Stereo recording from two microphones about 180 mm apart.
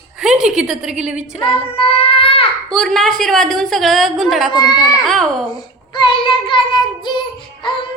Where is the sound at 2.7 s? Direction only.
5° left (ahead or behind).